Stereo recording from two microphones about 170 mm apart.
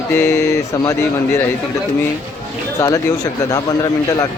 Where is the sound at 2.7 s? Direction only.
20° left (ahead or behind).